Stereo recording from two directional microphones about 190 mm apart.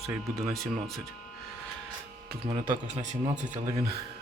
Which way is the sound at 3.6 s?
15° right (ahead or behind).